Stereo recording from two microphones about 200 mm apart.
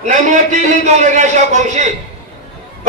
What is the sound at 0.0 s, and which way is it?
A woman's voice, 35° right (ahead or behind).